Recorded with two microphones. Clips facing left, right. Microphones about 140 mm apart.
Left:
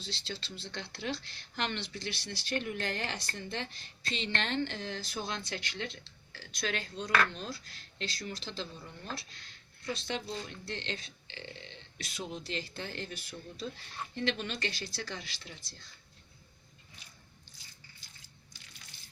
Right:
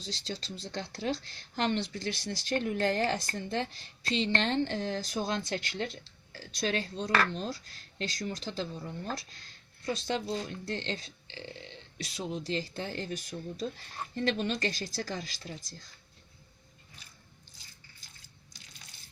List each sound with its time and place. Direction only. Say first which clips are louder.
0.0 s speech: right 3 dB; 40° right (ahead or behind)
9.8 s speech: right 4 dB; 40° right (ahead or behind)